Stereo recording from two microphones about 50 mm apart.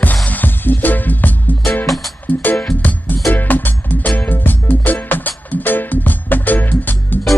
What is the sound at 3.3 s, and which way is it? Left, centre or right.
Music, left.